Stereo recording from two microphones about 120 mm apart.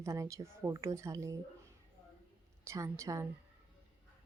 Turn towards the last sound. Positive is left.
turn(degrees=-25)  # may be behind; listen again after turning